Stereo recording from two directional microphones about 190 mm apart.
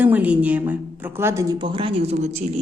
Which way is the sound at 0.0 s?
10° right (ahead or behind).